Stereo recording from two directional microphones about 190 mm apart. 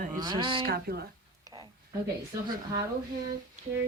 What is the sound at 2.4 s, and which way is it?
Speech, 20° right (ahead or behind).